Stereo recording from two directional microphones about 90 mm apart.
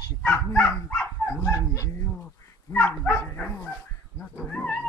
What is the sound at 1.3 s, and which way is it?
Dog, 35° left (ahead or behind).